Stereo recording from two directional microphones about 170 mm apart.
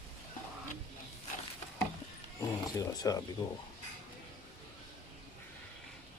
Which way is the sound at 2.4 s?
20° left (ahead or behind).